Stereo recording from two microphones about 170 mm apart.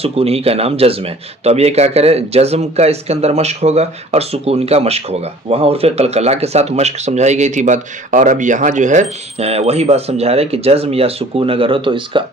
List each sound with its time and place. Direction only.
0.0 s speech: 35° right (ahead or behind)